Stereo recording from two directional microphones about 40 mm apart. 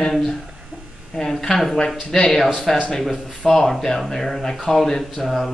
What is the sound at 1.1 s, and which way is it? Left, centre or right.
Speech, centre.